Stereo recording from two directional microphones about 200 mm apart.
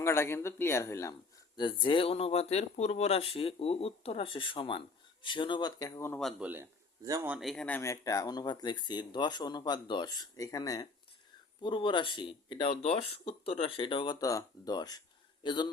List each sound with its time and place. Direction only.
0.0 s speech: 15° left (ahead or behind)
6.5 s speech: 15° right (ahead or behind)
7.3 s speech: centre (ahead or behind); by 15.7 s 25° left (ahead or behind)